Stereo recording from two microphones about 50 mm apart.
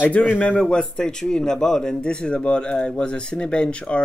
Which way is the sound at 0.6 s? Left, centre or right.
Centre.